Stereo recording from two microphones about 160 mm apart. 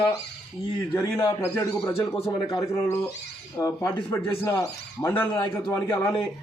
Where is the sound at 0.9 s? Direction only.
15° left (ahead or behind).